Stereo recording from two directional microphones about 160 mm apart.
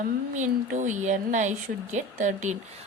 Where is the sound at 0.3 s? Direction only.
50° right (ahead or behind).